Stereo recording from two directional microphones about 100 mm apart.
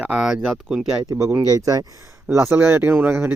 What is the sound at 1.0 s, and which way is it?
Speech, 35° right (ahead or behind).